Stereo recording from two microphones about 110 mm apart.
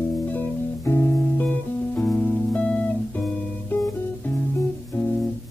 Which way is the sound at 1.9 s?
Centre (ahead or behind).